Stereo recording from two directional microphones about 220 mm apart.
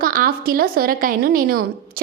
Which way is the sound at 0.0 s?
40° right (ahead or behind).